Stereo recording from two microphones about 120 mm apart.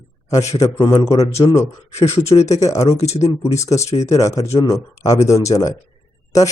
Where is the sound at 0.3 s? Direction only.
25° left (ahead or behind).